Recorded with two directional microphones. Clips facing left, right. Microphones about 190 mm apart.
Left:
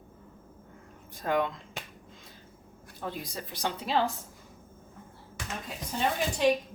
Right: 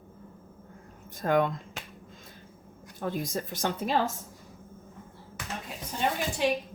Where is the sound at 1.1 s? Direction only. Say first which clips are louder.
Right 3 dB; 50° right (ahead or behind).